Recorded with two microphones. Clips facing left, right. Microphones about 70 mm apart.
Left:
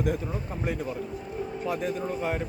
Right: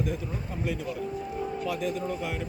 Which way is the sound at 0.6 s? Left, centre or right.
Left.